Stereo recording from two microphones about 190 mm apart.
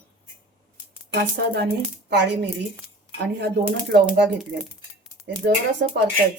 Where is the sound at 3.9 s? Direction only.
60° right (ahead or behind).